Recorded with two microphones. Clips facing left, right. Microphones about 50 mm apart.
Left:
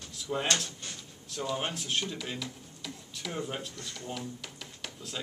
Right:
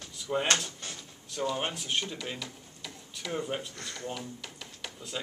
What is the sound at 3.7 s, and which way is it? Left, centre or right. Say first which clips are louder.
Speech: right 3 dB; right.